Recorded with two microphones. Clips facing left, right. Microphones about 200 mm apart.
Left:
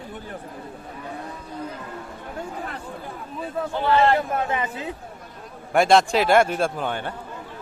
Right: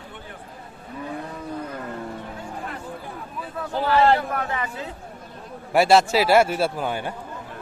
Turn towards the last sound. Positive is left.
turn(degrees=-10)  # may be behind; listen again after turning